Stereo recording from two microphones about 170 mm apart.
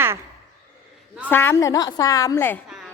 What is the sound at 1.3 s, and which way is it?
A woman's voice, 15° left (ahead or behind).